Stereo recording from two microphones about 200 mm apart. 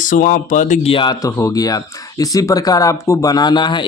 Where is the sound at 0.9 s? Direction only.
20° left (ahead or behind).